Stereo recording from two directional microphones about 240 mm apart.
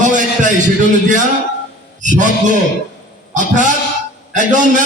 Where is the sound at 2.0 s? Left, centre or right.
Right.